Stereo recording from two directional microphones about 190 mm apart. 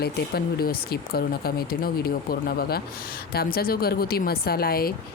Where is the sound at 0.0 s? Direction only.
55° left (ahead or behind).